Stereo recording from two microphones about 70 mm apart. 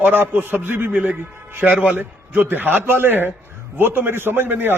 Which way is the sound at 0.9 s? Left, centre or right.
Centre.